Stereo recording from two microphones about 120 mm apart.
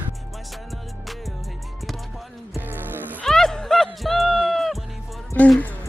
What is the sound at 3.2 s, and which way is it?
Music, 5° left (ahead or behind).